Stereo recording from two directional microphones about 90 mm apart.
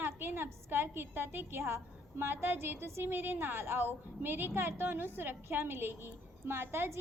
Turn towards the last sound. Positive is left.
turn(degrees=-25)  # may be behind; listen again after turning